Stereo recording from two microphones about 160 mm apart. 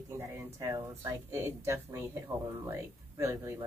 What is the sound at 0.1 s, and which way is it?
Speech, 20° right (ahead or behind).